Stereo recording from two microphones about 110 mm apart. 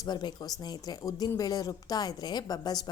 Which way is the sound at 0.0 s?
40° left (ahead or behind).